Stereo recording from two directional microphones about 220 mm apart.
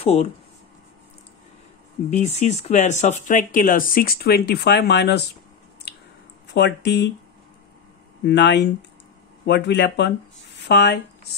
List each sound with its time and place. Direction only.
0.0 s speech: 25° left (ahead or behind)
2.0 s speech: 30° left (ahead or behind); by 5.2 s 50° left (ahead or behind)
6.5 s speech: 50° left (ahead or behind)
8.3 s speech: 50° left (ahead or behind)